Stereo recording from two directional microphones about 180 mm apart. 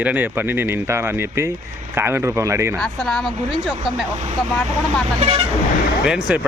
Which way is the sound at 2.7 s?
5° left (ahead or behind).